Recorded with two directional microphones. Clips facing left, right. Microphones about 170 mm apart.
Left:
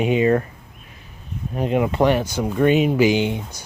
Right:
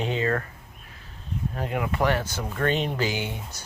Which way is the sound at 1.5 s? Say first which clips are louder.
Left 10 dB; 20° left (ahead or behind).